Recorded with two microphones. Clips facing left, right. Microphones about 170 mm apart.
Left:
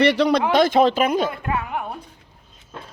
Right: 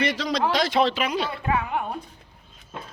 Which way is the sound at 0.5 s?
50° left (ahead or behind).